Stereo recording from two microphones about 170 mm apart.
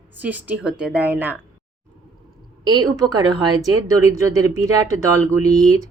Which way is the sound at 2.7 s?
25° right (ahead or behind).